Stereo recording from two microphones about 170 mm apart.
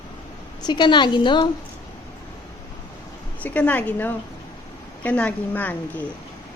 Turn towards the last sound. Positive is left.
turn(degrees=10)  # may be behind; listen again after turning